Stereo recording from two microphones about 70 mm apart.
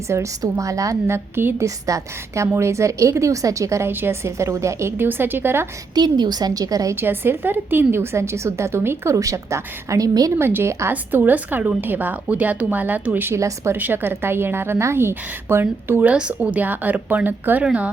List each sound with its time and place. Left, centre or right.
0.1 s speech: right
1.0 s a woman's voice: right
1.6 s speech: right
3.8 s a woman's voice: right
5.0 s a woman's voice: right
5.9 s a woman's voice: right
6.9 s a woman's voice: right
9.1 s a woman's voice: right
10.9 s a woman's voice: right
16.0 s a woman's voice: centre